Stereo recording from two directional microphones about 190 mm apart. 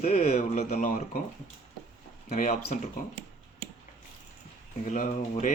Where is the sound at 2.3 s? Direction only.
40° left (ahead or behind).